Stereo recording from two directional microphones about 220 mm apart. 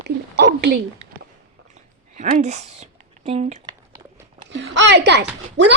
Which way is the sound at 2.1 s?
30° right (ahead or behind).